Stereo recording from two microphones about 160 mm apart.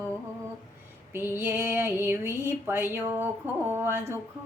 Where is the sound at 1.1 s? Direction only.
15° right (ahead or behind).